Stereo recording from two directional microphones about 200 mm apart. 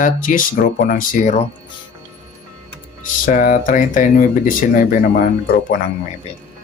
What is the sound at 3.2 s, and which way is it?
Speech, 45° left (ahead or behind).